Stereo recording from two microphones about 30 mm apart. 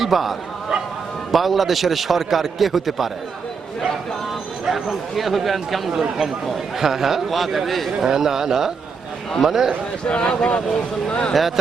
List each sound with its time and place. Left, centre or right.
0.0 s a man's voice: centre
4.6 s a man's voice: centre
5.9 s speech: centre
6.7 s speech: centre
8.0 s speech: centre
10.1 s speech: left